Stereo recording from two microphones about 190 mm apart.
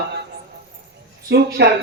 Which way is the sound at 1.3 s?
60° right (ahead or behind).